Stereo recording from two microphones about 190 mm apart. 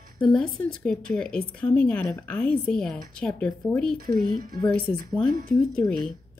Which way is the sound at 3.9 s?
50° right (ahead or behind).